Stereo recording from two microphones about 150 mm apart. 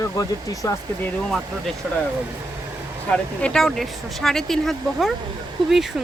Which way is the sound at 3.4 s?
5° left (ahead or behind).